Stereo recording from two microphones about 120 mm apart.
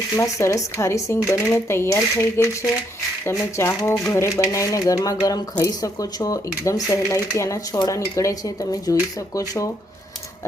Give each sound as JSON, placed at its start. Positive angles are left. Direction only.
{"t": 0.2, "sound": "speech", "side_deg": 25}